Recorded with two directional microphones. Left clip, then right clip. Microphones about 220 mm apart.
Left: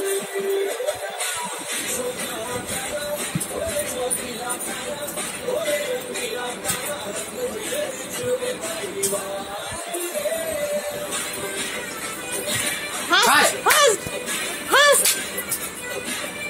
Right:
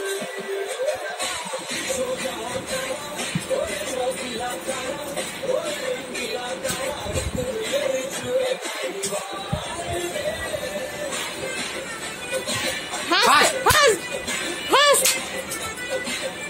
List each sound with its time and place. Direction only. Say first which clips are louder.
13.1 s music: even; 15° right (ahead or behind)